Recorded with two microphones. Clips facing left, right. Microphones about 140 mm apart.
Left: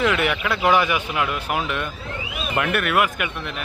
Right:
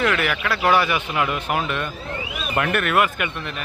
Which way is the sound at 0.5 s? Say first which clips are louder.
Even; 15° left (ahead or behind).